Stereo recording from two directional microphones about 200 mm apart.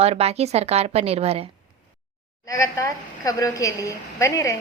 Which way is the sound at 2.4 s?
15° left (ahead or behind).